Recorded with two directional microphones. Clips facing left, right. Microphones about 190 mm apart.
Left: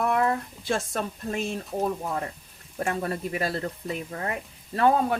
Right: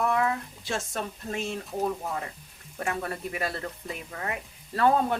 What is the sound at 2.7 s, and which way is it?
Speech, 35° left (ahead or behind).